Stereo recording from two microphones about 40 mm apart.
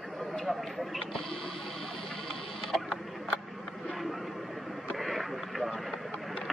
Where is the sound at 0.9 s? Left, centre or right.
Centre.